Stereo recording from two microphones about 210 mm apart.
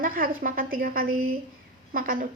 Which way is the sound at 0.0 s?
40° right (ahead or behind).